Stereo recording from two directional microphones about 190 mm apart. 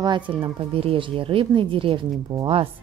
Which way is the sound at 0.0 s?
25° right (ahead or behind).